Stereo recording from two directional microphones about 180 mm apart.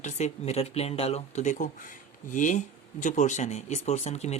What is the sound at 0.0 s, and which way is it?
Speech, 40° left (ahead or behind).